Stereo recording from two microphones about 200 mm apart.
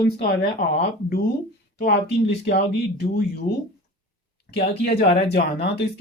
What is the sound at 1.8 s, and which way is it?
Speech, 55° left (ahead or behind).